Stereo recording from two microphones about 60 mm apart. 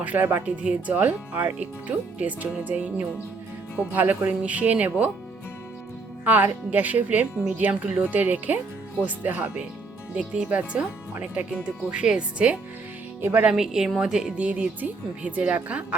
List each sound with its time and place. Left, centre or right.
0.0 s speech: right
3.9 s speech: right
6.2 s speech: right
10.5 s speech: right
13.2 s speech: right
13.5 s a woman's voice: centre
14.3 s speech: right